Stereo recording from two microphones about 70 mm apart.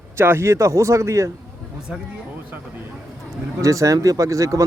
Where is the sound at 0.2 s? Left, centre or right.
Right.